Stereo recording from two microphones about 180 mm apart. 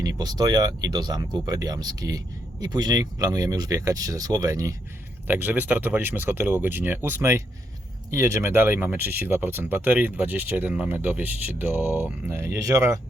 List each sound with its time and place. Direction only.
0.0 s speech: 20° right (ahead or behind)